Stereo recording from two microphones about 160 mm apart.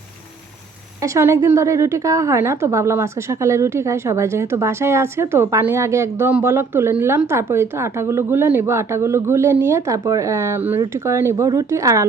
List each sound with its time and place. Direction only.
1.0 s a woman's voice: 20° right (ahead or behind)